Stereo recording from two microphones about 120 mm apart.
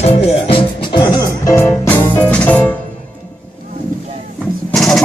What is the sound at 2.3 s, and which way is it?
Music, 15° left (ahead or behind).